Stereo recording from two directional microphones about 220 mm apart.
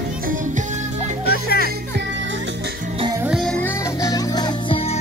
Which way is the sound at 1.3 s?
45° left (ahead or behind).